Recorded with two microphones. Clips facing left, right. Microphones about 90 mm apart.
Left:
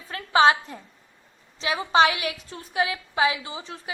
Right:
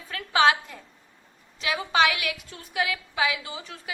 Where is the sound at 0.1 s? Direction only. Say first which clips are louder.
Left 3 dB; 30° left (ahead or behind).